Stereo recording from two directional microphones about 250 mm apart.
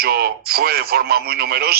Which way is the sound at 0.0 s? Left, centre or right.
Right.